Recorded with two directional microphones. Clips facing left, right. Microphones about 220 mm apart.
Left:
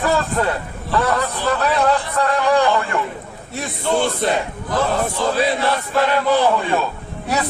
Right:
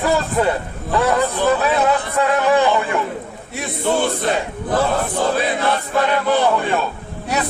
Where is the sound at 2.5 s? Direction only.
20° right (ahead or behind).